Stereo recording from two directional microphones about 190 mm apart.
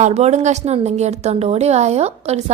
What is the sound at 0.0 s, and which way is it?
A woman's voice, 35° right (ahead or behind).